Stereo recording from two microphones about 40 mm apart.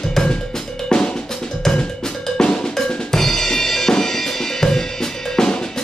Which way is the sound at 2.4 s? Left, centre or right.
Centre.